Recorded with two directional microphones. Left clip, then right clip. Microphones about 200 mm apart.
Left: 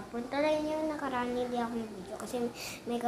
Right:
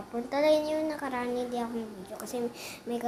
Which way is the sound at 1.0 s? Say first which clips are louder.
Right 1 dB; 15° right (ahead or behind).